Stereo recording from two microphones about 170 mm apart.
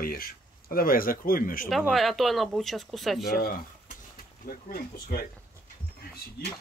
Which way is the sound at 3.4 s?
60° left (ahead or behind).